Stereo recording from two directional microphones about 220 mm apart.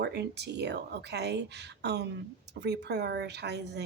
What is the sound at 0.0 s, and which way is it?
Speech, 50° right (ahead or behind).